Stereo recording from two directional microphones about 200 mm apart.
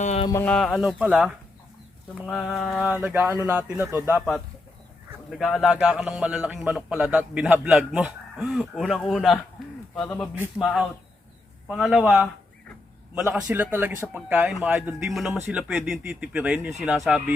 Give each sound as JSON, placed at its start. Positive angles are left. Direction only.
{"t": 0.0, "sound": "a sound", "side_deg": 35}
{"t": 0.3, "sound": "speech", "side_deg": 15}
{"t": 0.5, "sound": "a man's voice", "side_deg": 0}
{"t": 10.6, "sound": "a man's voice", "side_deg": 0}